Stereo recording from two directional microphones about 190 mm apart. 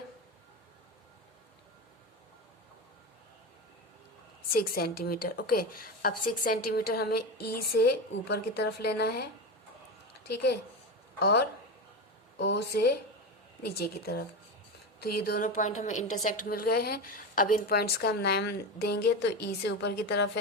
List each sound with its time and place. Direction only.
4.5 s a woman's voice: 50° left (ahead or behind)
10.2 s a woman's voice: 60° left (ahead or behind)
14.0 s a woman's voice: 60° left (ahead or behind); by 16.0 s 40° left (ahead or behind)
16.2 s a woman's voice: 50° left (ahead or behind)